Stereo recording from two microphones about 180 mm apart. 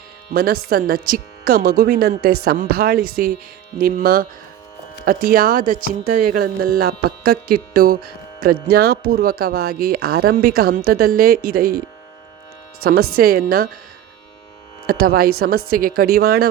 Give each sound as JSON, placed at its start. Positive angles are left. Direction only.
{"t": 0.3, "sound": "speech", "side_deg": -55}
{"t": 12.8, "sound": "speech", "side_deg": -55}
{"t": 14.8, "sound": "speech", "side_deg": -55}